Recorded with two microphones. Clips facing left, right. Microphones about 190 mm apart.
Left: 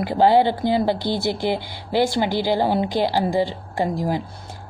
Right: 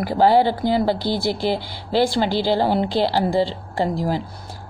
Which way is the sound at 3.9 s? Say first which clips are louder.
Right 1 dB; 20° left (ahead or behind).